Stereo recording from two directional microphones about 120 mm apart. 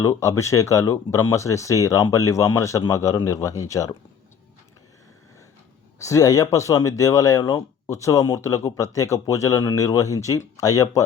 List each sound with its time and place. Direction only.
0.0 s speech: 30° left (ahead or behind)
6.0 s speech: 25° left (ahead or behind)